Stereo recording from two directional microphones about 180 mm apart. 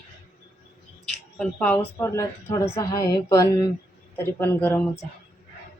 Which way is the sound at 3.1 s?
15° left (ahead or behind).